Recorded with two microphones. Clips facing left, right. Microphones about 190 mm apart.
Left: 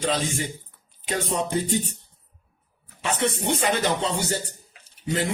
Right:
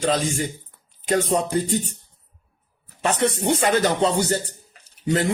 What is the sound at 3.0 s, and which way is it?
Music, 45° right (ahead or behind).